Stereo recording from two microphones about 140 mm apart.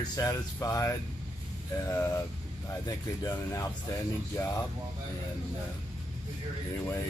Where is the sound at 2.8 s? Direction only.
25° left (ahead or behind).